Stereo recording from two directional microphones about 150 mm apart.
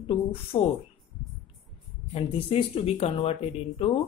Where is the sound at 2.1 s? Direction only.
40° left (ahead or behind).